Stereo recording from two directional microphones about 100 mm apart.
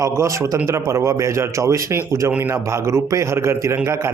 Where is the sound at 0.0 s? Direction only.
30° right (ahead or behind).